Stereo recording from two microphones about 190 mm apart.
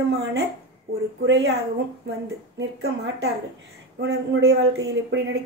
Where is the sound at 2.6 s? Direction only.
65° right (ahead or behind).